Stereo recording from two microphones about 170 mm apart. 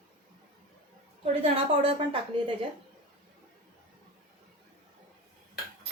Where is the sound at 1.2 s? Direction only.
35° right (ahead or behind).